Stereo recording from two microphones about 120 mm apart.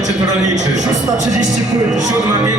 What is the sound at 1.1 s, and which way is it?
Speech, 90° right.